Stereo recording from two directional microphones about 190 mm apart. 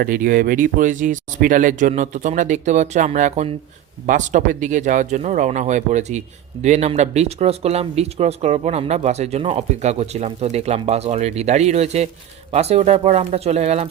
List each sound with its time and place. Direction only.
0.0 s speech: 50° right (ahead or behind)